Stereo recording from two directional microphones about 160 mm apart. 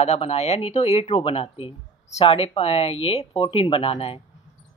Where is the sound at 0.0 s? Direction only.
40° left (ahead or behind).